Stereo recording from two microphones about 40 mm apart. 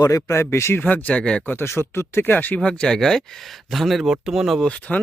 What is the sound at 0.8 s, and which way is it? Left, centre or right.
Speech, left.